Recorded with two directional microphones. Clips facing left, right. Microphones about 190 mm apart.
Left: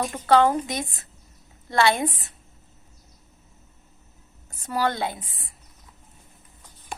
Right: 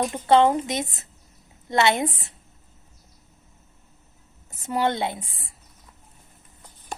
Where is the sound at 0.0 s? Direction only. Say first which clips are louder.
Right 1 dB; 20° right (ahead or behind).